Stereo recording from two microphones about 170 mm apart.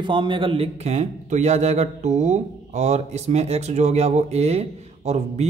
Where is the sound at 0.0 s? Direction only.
30° right (ahead or behind).